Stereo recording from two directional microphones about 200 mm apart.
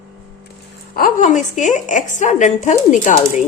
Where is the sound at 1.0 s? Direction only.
40° left (ahead or behind).